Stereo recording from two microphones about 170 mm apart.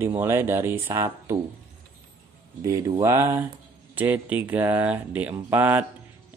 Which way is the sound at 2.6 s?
20° right (ahead or behind).